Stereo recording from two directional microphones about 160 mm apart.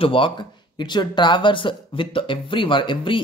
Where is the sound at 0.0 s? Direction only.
35° left (ahead or behind).